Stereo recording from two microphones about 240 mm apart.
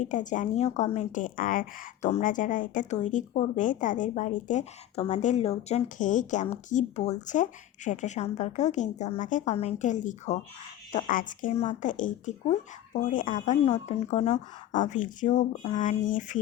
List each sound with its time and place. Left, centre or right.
0.1 s speech: left